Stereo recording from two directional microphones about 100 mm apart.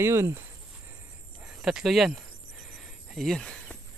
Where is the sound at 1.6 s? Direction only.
5° right (ahead or behind).